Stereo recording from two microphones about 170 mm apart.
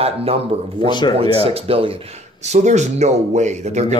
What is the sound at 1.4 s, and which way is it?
Speech, 35° right (ahead or behind).